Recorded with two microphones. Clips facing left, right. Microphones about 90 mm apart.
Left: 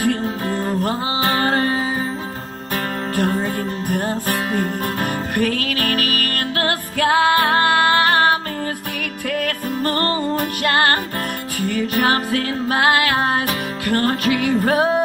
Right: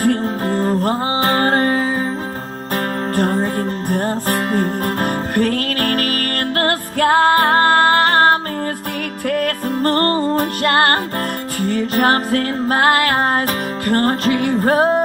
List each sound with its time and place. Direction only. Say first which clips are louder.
0.0 s music: right 3 dB; 35° right (ahead or behind)
3.2 s music: right 2 dB; 35° right (ahead or behind)